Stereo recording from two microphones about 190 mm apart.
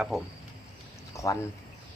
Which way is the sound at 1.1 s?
15° left (ahead or behind).